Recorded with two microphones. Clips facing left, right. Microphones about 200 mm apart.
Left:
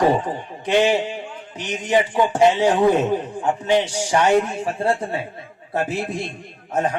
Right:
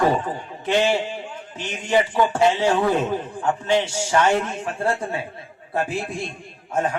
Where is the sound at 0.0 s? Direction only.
15° left (ahead or behind).